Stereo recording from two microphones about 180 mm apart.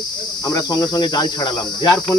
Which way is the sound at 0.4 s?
20° left (ahead or behind).